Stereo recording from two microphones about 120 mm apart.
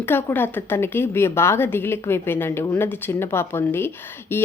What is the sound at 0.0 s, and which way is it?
A woman's voice, 15° left (ahead or behind).